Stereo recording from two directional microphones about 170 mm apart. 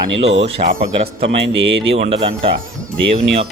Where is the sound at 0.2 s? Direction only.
35° right (ahead or behind).